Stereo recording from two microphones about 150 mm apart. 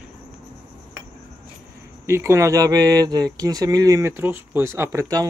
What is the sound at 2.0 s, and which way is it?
Speech, 20° right (ahead or behind).